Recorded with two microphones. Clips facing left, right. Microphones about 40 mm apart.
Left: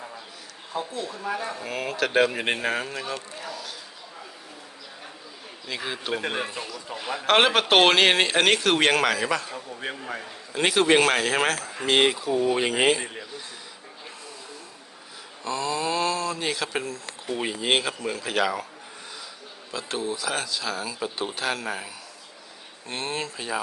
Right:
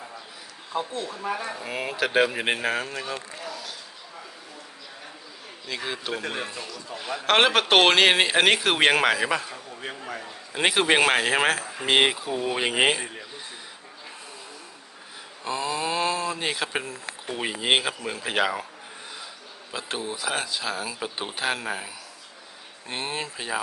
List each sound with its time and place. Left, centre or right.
0.7 s speech: right
1.2 s speech: centre
3.4 s a sound: centre
5.6 s a man's voice: centre
10.5 s speech: centre
15.4 s a sound: centre
17.3 s speech: centre
19.7 s speech: right